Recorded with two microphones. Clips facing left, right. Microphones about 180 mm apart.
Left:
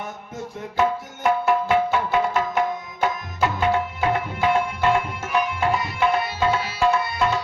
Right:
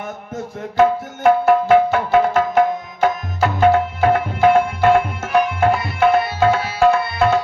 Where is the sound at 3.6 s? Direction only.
50° right (ahead or behind).